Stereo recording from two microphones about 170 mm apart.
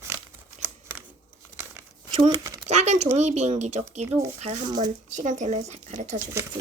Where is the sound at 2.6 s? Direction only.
40° right (ahead or behind).